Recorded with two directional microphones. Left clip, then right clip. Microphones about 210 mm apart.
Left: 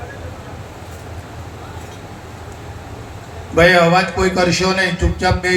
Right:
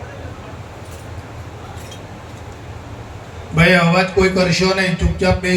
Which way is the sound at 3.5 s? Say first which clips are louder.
Left 3 dB; 40° left (ahead or behind).